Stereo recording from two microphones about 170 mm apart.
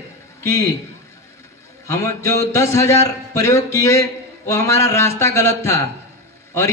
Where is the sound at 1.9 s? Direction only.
15° left (ahead or behind).